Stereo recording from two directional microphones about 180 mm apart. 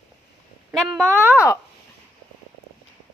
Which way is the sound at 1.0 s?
10° right (ahead or behind).